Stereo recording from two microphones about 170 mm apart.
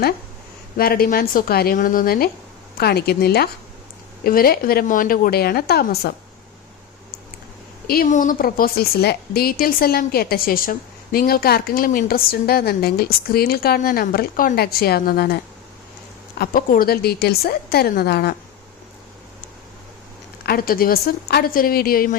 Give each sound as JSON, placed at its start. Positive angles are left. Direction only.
{"t": 0.8, "sound": "a woman's voice", "side_deg": 60}
{"t": 8.0, "sound": "a woman's voice", "side_deg": 50}
{"t": 16.4, "sound": "a woman's voice", "side_deg": 55}
{"t": 20.4, "sound": "a woman's voice", "side_deg": 60}